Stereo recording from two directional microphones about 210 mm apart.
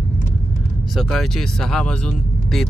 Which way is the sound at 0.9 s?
Centre (ahead or behind).